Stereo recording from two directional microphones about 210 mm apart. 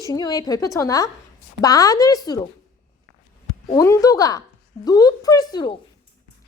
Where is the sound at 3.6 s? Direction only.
15° left (ahead or behind).